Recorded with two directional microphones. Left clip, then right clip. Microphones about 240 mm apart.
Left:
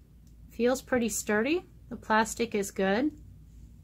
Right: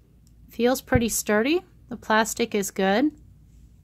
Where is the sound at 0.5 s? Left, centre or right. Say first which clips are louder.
Right 5 dB; right.